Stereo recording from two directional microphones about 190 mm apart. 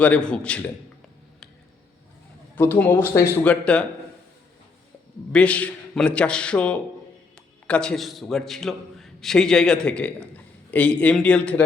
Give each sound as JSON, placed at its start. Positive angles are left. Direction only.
{"t": 0.0, "sound": "a man's voice", "side_deg": 5}
{"t": 2.6, "sound": "speech", "side_deg": 10}
{"t": 5.3, "sound": "a man's voice", "side_deg": 5}